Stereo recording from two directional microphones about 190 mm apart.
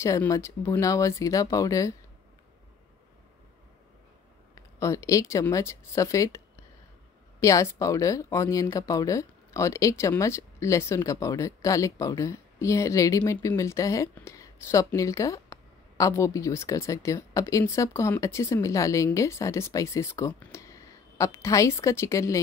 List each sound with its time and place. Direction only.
0.0 s speech: 15° left (ahead or behind)
4.6 s speech: 15° left (ahead or behind)